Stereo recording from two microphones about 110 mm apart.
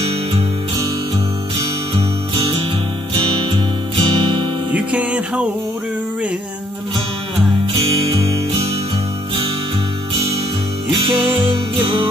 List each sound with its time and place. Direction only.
3.2 s music: 50° right (ahead or behind)
4.7 s music: 10° right (ahead or behind)